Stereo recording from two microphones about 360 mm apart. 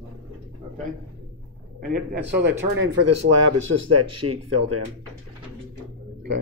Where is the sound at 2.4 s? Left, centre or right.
Right.